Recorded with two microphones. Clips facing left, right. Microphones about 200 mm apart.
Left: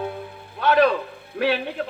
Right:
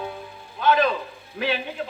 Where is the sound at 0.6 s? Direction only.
65° left (ahead or behind).